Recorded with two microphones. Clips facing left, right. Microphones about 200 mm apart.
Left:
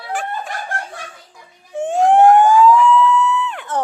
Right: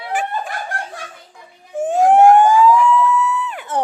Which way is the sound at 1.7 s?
5° right (ahead or behind).